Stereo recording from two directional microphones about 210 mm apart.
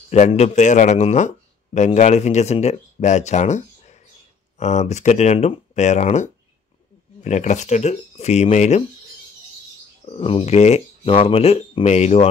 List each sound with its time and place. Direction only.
0.1 s a man's voice: 30° left (ahead or behind)
7.2 s speech: 35° left (ahead or behind)
10.0 s speech: 25° left (ahead or behind)